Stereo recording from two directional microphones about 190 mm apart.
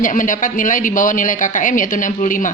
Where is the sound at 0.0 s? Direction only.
45° left (ahead or behind).